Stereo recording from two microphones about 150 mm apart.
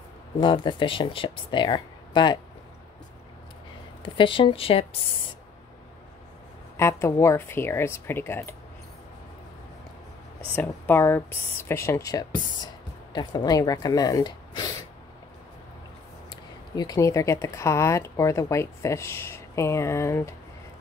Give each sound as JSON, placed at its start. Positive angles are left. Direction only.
{"t": 0.4, "sound": "speech", "side_deg": 35}
{"t": 4.0, "sound": "speech", "side_deg": 35}
{"t": 6.8, "sound": "speech", "side_deg": 20}
{"t": 10.5, "sound": "speech", "side_deg": 15}
{"t": 16.7, "sound": "speech", "side_deg": 25}